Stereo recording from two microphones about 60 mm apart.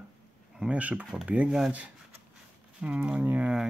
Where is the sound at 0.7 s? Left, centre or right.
Right.